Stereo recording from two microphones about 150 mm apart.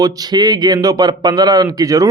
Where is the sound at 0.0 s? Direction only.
25° right (ahead or behind).